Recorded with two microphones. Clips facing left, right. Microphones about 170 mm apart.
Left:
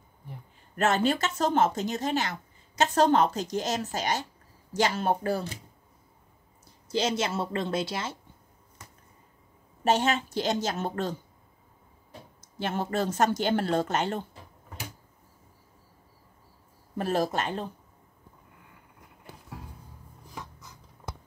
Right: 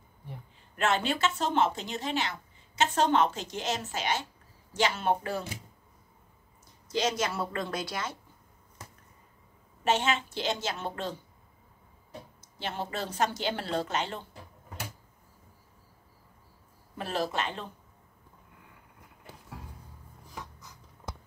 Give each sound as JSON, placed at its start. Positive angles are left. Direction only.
{"t": 0.7, "sound": "speech", "side_deg": 45}
{"t": 6.9, "sound": "a woman's voice", "side_deg": 30}
{"t": 9.8, "sound": "speech", "side_deg": 40}
{"t": 12.5, "sound": "speech", "side_deg": 50}
{"t": 16.9, "sound": "speech", "side_deg": 45}